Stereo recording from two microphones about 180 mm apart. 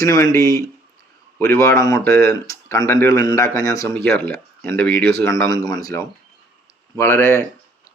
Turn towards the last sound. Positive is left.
turn(degrees=15)  # may be behind; listen again after turning